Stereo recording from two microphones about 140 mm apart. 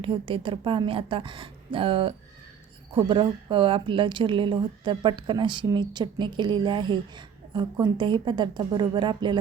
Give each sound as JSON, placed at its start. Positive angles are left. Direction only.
{"t": 0.0, "sound": "a woman's voice", "side_deg": -40}